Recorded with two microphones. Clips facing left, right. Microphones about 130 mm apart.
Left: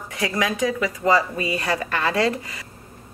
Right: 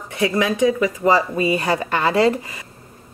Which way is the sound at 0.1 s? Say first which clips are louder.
Right 5 dB; 30° right (ahead or behind).